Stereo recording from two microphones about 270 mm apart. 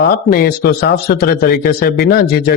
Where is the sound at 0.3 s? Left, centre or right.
Left.